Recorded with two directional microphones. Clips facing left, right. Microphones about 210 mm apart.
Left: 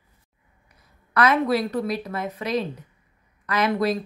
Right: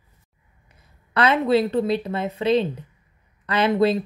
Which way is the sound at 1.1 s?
25° right (ahead or behind).